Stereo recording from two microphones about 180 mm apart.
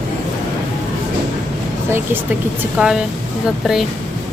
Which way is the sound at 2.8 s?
5° right (ahead or behind).